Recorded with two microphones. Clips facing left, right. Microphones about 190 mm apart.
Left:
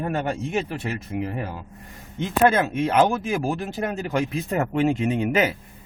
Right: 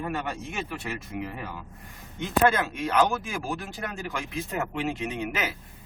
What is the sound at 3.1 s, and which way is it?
Speech, 45° left (ahead or behind).